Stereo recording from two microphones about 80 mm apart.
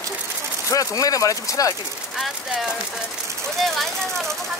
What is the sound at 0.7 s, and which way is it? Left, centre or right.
Speech, left.